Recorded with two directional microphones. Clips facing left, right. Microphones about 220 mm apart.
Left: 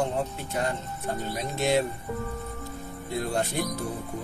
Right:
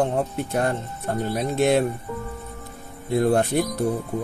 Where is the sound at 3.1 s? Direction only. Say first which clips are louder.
Right 9 dB; 55° right (ahead or behind).